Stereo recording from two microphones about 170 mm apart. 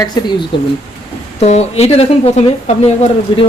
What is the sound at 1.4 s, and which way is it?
Speech, 40° left (ahead or behind).